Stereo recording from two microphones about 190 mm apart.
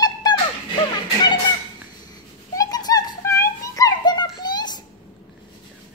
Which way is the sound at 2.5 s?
20° left (ahead or behind).